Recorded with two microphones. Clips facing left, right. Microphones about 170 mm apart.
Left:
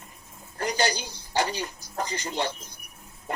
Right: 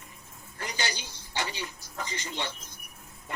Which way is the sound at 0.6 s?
40° left (ahead or behind).